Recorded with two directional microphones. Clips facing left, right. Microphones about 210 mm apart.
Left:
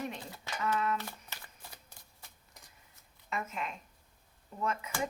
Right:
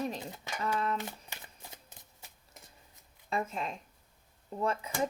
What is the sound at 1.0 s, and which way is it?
Shuffling cards, 20° right (ahead or behind).